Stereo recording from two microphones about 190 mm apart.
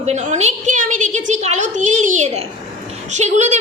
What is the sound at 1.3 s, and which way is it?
A woman's voice, 40° right (ahead or behind).